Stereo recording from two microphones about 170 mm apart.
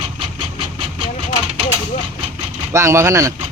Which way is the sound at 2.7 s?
15° right (ahead or behind).